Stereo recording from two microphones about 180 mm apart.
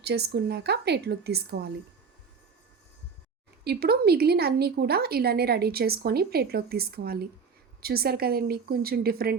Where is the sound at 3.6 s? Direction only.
60° right (ahead or behind).